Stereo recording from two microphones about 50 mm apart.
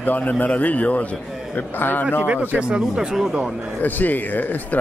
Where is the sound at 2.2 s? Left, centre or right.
Right.